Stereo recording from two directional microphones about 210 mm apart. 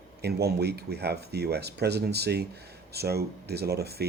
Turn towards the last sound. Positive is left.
turn(degrees=-50)  # may be behind; listen again after turning